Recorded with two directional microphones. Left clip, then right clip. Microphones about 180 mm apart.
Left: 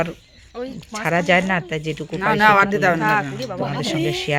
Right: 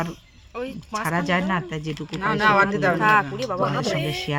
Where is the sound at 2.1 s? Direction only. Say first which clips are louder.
Left 4 dB; 50° left (ahead or behind).